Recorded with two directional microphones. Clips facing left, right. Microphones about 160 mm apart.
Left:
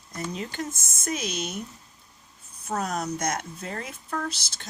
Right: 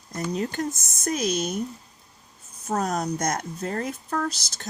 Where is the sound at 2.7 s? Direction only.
35° right (ahead or behind).